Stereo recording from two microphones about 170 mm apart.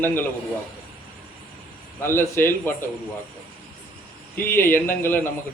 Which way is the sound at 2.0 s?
15° left (ahead or behind).